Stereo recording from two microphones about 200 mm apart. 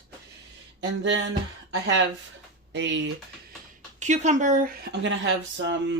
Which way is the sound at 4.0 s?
35° right (ahead or behind).